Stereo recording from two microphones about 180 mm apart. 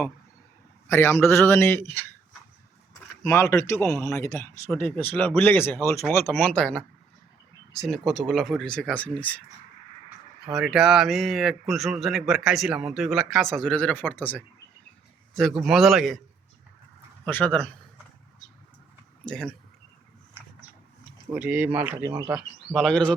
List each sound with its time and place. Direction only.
0.9 s speech: 15° left (ahead or behind)
3.2 s a man's voice: 15° left (ahead or behind)
10.5 s a man's voice: centre (ahead or behind)
17.2 s speech: 10° left (ahead or behind)
19.2 s a man's voice: 5° left (ahead or behind)
21.3 s a man's voice: 10° right (ahead or behind)